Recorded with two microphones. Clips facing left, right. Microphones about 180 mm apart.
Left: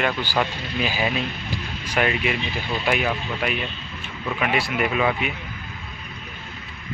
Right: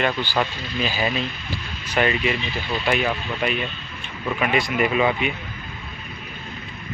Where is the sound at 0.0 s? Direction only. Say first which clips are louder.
Right 1 dB; 10° left (ahead or behind).